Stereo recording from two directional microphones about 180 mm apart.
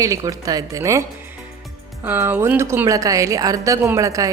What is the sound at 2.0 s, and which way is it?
A woman's voice, 10° right (ahead or behind).